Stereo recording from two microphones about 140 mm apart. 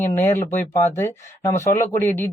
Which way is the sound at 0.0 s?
15° left (ahead or behind).